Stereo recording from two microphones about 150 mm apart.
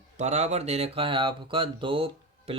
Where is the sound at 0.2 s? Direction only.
50° right (ahead or behind).